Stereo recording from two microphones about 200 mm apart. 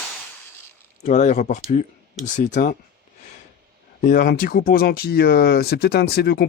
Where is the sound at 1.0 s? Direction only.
35° left (ahead or behind).